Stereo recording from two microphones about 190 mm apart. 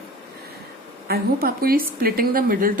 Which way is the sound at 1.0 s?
55° right (ahead or behind).